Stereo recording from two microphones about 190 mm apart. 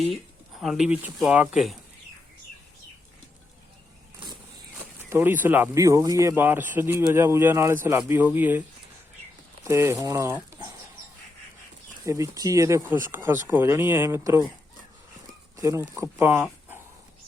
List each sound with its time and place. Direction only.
0.5 s speech: centre (ahead or behind)
5.0 s speech: 10° right (ahead or behind)
9.6 s speech: 15° right (ahead or behind)
12.0 s speech: 15° right (ahead or behind)
15.5 s speech: 15° right (ahead or behind)